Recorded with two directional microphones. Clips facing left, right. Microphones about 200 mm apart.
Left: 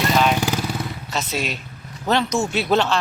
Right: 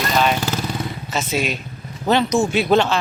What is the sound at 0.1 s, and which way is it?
Vehicle, centre (ahead or behind).